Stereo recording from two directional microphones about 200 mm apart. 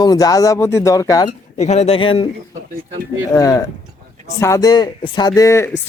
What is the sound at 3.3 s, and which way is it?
Speech, 15° left (ahead or behind).